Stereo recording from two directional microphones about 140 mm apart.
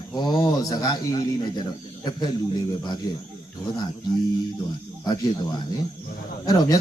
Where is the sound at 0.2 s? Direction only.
30° left (ahead or behind).